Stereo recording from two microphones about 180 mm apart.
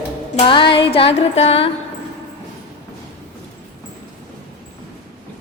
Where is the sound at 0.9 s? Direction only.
30° left (ahead or behind).